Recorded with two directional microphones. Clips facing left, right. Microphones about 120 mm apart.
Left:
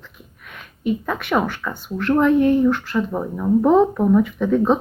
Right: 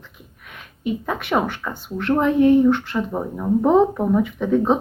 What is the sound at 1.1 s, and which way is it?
Speech, 25° right (ahead or behind).